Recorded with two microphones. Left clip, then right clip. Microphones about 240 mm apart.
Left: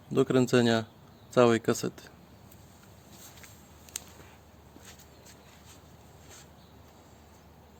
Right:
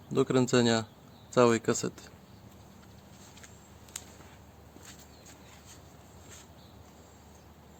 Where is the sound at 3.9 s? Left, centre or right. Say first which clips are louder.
Left 3 dB; left.